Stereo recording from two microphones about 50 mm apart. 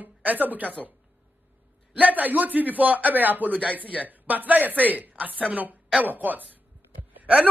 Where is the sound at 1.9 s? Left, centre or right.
Right.